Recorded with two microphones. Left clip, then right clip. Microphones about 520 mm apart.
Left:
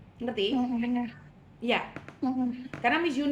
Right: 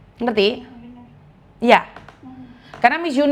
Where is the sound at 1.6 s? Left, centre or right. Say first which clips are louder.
Right 15 dB; right.